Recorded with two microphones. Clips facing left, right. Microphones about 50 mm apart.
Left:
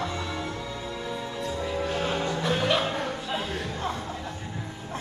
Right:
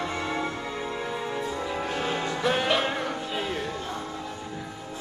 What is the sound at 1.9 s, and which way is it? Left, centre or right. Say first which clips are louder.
Music: left 1 dB; centre.